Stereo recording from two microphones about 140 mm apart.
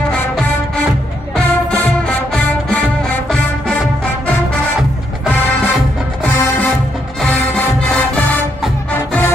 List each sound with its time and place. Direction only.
1.3 s music: 10° left (ahead or behind)
8.9 s music: 15° left (ahead or behind)